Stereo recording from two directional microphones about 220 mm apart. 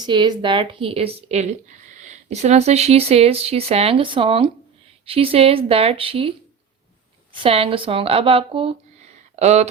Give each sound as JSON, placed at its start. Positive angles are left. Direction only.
{"t": 0.0, "sound": "speech", "side_deg": -20}
{"t": 7.4, "sound": "speech", "side_deg": -25}